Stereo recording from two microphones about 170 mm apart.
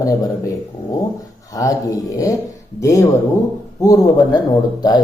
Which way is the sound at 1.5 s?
20° left (ahead or behind).